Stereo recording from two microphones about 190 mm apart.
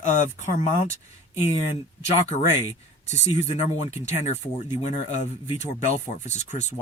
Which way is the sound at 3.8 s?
35° left (ahead or behind).